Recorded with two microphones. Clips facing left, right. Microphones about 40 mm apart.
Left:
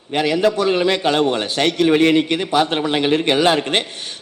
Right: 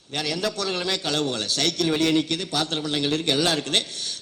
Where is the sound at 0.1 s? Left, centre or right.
Left.